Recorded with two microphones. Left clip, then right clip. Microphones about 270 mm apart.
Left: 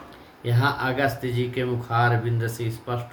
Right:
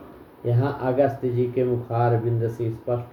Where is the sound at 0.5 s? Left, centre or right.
Left.